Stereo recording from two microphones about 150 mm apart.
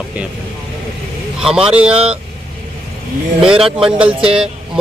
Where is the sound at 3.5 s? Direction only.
35° right (ahead or behind).